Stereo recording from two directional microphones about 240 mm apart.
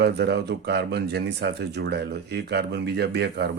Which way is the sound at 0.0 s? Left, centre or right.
Right.